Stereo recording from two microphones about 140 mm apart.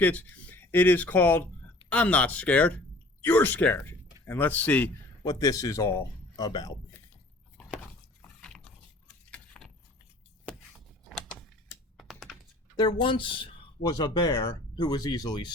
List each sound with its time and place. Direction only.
0.0 s speech: 10° left (ahead or behind)
5.2 s a man's voice: 25° left (ahead or behind)
8.2 s a sound: 5° left (ahead or behind)
9.3 s vehicle: 5° left (ahead or behind)
11.1 s a sound: 5° left (ahead or behind)
11.9 s computer keyboard: centre (ahead or behind)
12.7 s speech: 30° left (ahead or behind)